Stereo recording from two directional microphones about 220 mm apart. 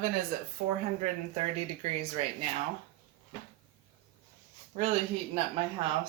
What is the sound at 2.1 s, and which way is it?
Speech, 30° right (ahead or behind).